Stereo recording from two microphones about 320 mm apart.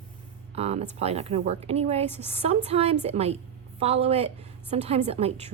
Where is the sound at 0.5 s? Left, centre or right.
Centre.